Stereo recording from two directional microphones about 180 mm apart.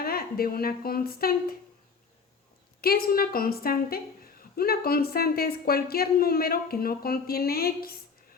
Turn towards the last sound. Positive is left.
turn(degrees=55)  # may be behind; listen again after turning